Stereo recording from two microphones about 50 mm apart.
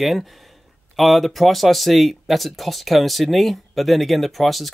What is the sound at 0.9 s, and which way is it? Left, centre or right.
Speech, centre.